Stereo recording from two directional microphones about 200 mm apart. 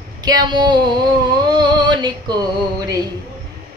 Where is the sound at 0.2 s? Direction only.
20° right (ahead or behind).